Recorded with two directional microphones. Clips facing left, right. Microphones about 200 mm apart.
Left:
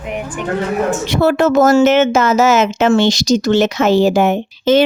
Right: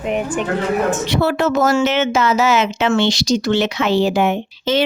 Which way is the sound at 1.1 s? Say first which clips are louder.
Left 4 dB; 45° left (ahead or behind).